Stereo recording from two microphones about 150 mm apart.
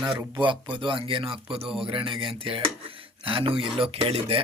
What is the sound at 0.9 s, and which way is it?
Speech, 35° right (ahead or behind).